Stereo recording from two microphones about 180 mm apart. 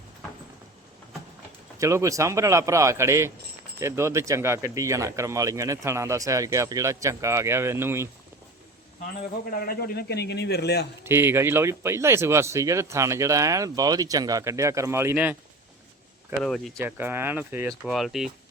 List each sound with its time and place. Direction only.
1.8 s speech: 15° right (ahead or behind)
9.5 s a man's voice: 55° left (ahead or behind)
11.0 s speech: 15° right (ahead or behind)
16.4 s speech: centre (ahead or behind)
16.7 s speech: 10° right (ahead or behind)